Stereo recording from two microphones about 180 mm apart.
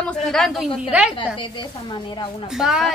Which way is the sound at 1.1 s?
25° left (ahead or behind).